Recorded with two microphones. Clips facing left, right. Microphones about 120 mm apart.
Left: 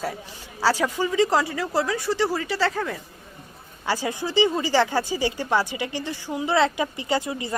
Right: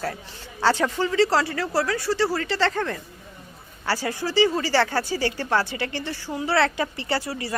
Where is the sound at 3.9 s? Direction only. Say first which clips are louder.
Even; 15° left (ahead or behind).